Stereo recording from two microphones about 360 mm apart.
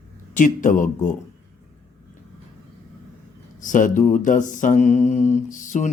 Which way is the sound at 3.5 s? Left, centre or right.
Left.